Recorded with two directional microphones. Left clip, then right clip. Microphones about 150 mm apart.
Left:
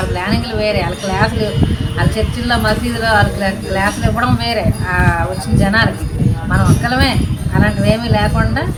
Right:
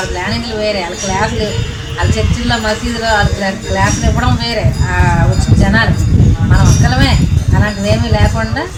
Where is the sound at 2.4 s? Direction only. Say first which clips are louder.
Even; 20° right (ahead or behind).